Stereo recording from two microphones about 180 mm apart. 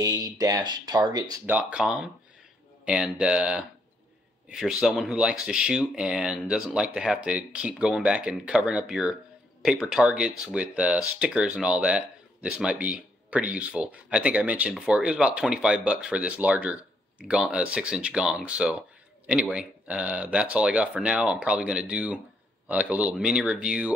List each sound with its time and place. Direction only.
0.0 s speech: 20° right (ahead or behind)
1.4 s speech: 5° right (ahead or behind)